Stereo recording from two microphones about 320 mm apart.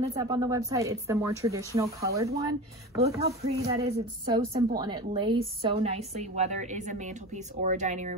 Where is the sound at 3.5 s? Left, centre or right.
Centre.